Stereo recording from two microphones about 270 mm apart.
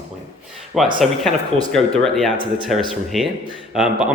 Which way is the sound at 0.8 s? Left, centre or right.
Centre.